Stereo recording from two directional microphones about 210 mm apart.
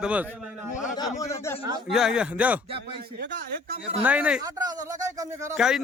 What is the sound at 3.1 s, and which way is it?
Speech, 55° right (ahead or behind).